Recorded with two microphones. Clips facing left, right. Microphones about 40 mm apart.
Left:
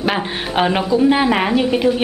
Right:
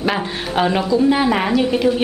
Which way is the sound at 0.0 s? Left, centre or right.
Centre.